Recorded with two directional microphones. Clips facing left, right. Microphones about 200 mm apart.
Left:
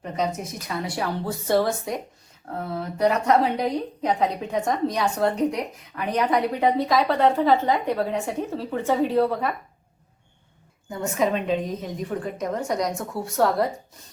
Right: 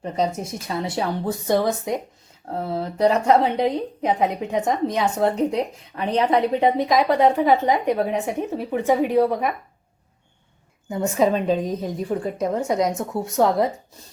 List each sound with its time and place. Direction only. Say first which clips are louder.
0.0 s a woman's voice: right 3 dB; 30° right (ahead or behind)
2.5 s a woman's voice: right 4 dB; 30° right (ahead or behind)
10.8 s a woman's voice: right 4 dB; 25° right (ahead or behind)